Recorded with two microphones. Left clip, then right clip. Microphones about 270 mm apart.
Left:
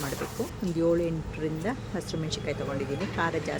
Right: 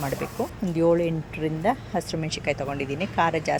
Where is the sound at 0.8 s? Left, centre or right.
Centre.